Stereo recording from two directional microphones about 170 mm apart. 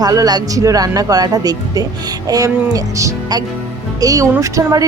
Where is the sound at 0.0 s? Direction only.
20° right (ahead or behind).